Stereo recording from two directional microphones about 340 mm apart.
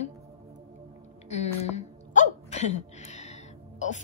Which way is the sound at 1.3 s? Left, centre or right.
Centre.